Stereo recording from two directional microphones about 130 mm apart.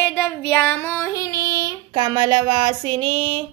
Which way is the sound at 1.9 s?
30° right (ahead or behind).